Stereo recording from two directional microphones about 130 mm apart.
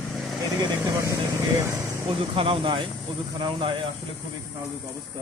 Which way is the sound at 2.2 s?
45° right (ahead or behind).